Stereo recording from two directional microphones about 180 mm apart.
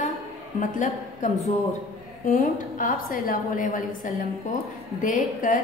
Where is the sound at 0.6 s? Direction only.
45° left (ahead or behind).